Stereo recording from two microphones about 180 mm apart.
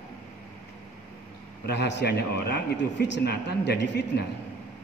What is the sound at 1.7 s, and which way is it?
A man's voice, 70° left (ahead or behind).